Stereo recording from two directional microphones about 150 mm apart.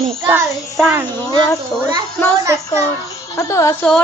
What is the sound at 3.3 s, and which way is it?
Speech, 20° left (ahead or behind).